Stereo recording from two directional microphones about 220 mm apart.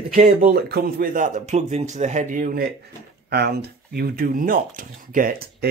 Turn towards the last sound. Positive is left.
turn(degrees=-40)  # may be behind; listen again after turning